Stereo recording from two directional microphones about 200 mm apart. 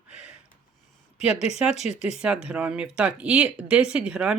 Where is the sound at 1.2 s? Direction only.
30° left (ahead or behind).